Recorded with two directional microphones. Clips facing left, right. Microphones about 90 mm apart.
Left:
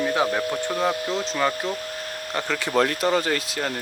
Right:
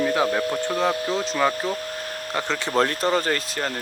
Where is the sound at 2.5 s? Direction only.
30° right (ahead or behind).